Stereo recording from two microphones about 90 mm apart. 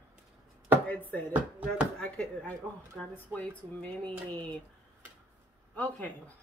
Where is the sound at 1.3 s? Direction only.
15° right (ahead or behind).